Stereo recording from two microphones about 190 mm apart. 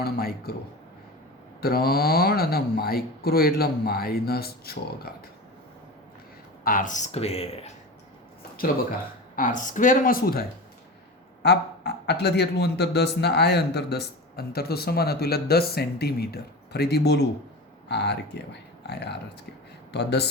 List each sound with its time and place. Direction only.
0.0 s speech: 55° left (ahead or behind)
1.6 s speech: 55° left (ahead or behind)
6.7 s speech: 45° left (ahead or behind)
9.3 s speech: 40° left (ahead or behind)
11.4 s speech: 60° left (ahead or behind)